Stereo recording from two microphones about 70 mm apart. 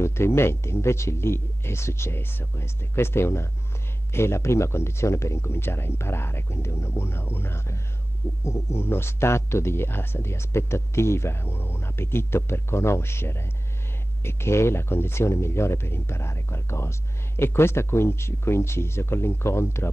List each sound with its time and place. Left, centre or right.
0.0 s speech: left